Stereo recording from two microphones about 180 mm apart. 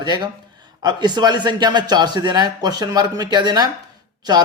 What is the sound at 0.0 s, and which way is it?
A man's voice, 25° right (ahead or behind).